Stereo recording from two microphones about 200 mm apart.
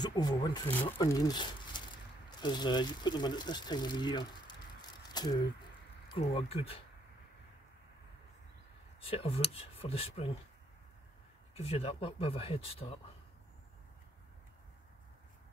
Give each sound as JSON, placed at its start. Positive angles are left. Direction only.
{"t": 0.0, "sound": "speech", "side_deg": 20}
{"t": 5.1, "sound": "a sound", "side_deg": 20}
{"t": 6.2, "sound": "speech", "side_deg": 30}
{"t": 9.0, "sound": "speech", "side_deg": 30}
{"t": 11.5, "sound": "speech", "side_deg": 30}